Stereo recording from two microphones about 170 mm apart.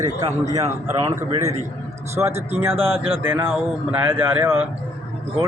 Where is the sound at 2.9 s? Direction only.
35° right (ahead or behind).